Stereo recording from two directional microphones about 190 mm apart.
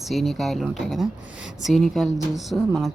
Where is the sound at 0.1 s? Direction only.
Centre (ahead or behind).